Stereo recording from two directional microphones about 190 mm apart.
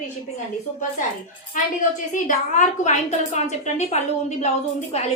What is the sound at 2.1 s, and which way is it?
A woman's voice, 40° left (ahead or behind).